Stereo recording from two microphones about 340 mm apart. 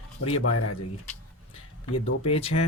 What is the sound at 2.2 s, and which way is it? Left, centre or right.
Speech, centre.